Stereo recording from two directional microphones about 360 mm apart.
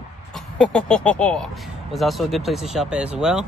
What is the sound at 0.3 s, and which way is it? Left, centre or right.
Speech, centre.